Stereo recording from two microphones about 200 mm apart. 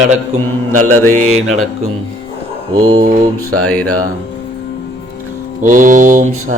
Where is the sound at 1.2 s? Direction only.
35° right (ahead or behind).